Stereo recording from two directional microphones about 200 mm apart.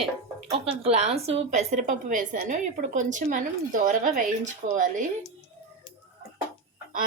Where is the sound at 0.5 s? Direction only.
30° right (ahead or behind).